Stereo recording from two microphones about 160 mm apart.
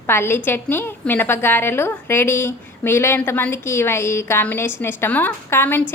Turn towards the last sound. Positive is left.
turn(degrees=10)  # may be behind; listen again after turning